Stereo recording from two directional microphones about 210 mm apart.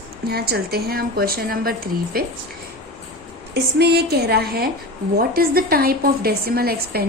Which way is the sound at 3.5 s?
50° right (ahead or behind).